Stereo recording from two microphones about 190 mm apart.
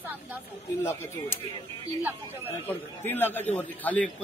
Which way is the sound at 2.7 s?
10° left (ahead or behind).